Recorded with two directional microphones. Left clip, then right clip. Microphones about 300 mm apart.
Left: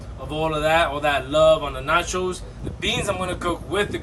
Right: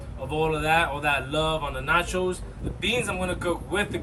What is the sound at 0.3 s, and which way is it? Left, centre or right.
A man's voice, centre.